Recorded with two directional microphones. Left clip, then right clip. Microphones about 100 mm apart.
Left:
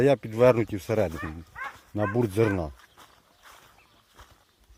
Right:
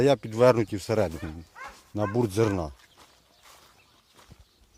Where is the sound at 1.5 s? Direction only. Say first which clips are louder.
Left 7 dB; 45° right (ahead or behind).